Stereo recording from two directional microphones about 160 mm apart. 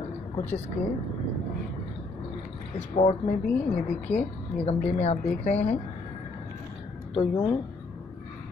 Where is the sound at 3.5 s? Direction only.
5° left (ahead or behind).